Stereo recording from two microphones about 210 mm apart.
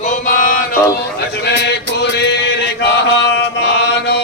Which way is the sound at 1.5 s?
50° left (ahead or behind).